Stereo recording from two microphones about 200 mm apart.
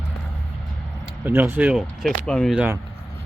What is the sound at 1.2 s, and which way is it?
Speech, 10° right (ahead or behind).